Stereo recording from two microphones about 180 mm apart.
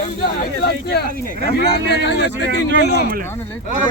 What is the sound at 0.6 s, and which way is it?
Speech, 60° left (ahead or behind).